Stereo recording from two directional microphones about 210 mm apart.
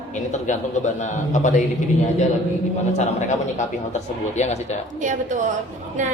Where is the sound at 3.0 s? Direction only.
35° left (ahead or behind).